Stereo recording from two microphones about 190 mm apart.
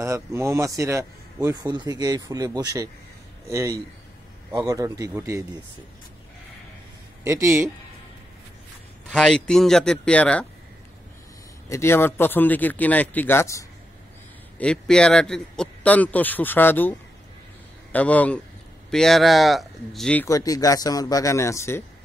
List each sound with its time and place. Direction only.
0.0 s speech: 15° right (ahead or behind)
7.2 s speech: 15° right (ahead or behind)
9.1 s speech: 5° left (ahead or behind)
11.7 s a man's voice: 15° left (ahead or behind)
17.9 s a man's voice: 10° left (ahead or behind)
20.2 s speech: 20° left (ahead or behind)